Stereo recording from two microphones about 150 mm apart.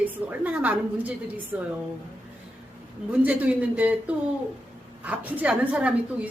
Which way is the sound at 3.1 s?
10° right (ahead or behind).